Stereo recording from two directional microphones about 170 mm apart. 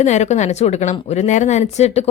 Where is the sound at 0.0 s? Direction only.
40° left (ahead or behind).